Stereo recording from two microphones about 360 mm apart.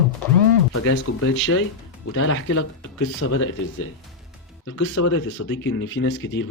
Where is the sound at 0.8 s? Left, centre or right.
Left.